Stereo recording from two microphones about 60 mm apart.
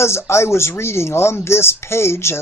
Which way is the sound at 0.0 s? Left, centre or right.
Left.